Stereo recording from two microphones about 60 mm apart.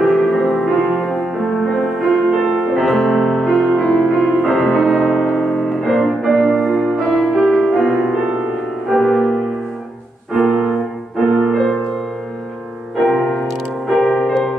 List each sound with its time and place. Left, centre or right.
0.0 s music: centre
11.5 s music: centre
13.0 s music: centre